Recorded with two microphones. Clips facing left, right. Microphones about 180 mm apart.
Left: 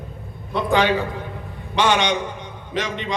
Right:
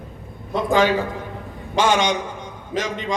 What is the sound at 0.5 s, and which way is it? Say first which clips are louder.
A man's voice: right 1 dB; 45° right (ahead or behind).